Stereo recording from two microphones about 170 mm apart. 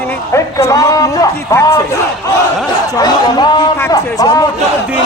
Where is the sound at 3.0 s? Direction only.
25° left (ahead or behind).